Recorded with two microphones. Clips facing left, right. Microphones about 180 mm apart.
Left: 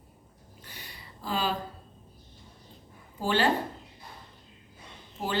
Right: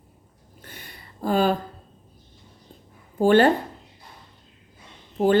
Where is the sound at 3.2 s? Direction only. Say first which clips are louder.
Right 10 dB; 50° right (ahead or behind).